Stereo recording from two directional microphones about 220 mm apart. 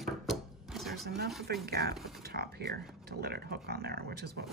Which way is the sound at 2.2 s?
45° right (ahead or behind).